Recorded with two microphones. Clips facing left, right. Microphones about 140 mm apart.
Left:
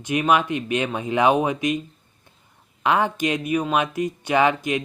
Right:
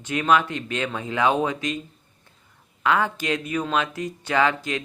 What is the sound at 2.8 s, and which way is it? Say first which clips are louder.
Speech: left 2 dB; 20° left (ahead or behind).